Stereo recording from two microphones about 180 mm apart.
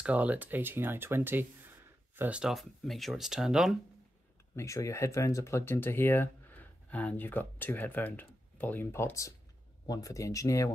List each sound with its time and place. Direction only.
0.0 s speech: 10° right (ahead or behind)
4.6 s speech: 15° left (ahead or behind)